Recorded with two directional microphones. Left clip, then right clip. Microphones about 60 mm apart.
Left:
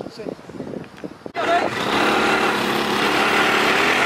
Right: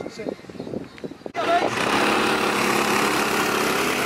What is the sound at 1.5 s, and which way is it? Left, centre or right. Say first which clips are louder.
Vehicle: left 1 dB; centre.